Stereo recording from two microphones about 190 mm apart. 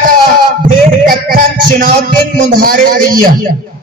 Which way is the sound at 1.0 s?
45° right (ahead or behind).